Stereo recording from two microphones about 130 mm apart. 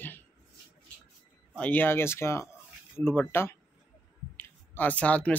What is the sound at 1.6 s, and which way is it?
Speech, 15° left (ahead or behind).